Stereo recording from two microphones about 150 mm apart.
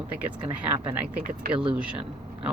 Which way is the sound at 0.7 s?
10° right (ahead or behind).